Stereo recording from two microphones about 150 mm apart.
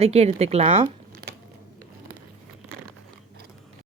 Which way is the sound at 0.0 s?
45° right (ahead or behind).